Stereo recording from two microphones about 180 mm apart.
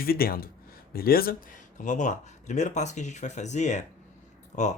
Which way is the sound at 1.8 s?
45° left (ahead or behind).